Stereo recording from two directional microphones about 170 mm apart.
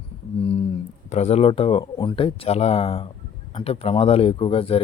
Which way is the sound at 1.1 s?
40° left (ahead or behind).